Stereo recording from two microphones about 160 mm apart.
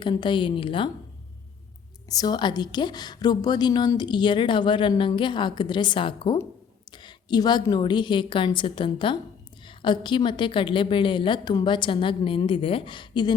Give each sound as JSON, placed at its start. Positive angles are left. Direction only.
{"t": 0.0, "sound": "a woman's voice", "side_deg": 30}
{"t": 2.0, "sound": "a woman's voice", "side_deg": 25}